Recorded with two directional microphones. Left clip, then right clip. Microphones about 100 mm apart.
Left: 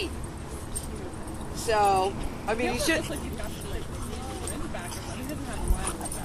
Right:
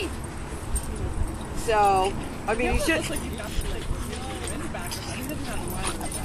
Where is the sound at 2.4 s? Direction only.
25° left (ahead or behind).